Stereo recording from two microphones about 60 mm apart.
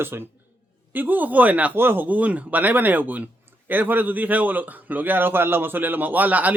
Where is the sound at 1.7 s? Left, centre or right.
Right.